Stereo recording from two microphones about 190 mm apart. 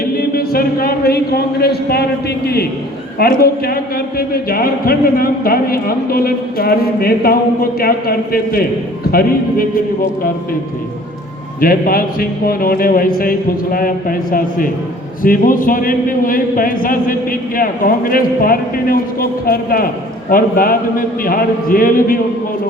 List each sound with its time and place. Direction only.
0.0 s a man's voice: 50° left (ahead or behind)
3.2 s a man's voice: 55° left (ahead or behind)
11.6 s a man's voice: 50° left (ahead or behind)